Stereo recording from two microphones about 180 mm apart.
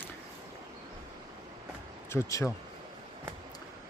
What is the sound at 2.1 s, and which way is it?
Speech, 15° left (ahead or behind).